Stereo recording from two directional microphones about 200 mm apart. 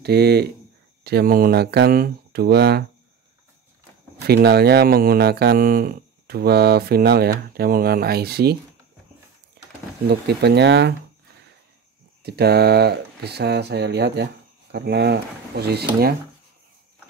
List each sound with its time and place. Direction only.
0.0 s speech: 55° right (ahead or behind)
4.2 s speech: 55° right (ahead or behind)
10.0 s speech: 55° right (ahead or behind)
12.2 s speech: 55° right (ahead or behind)